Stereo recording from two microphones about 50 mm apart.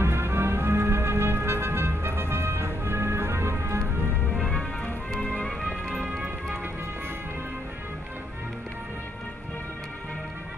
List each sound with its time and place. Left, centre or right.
0.0 s music: right
5.1 s music: centre
5.6 s music: centre